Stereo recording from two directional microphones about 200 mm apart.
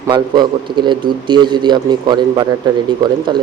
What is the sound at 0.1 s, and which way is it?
A man's voice, 25° right (ahead or behind).